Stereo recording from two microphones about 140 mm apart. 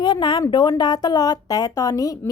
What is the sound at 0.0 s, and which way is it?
A woman's voice, 35° left (ahead or behind).